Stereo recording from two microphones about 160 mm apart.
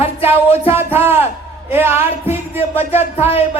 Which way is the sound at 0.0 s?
40° left (ahead or behind).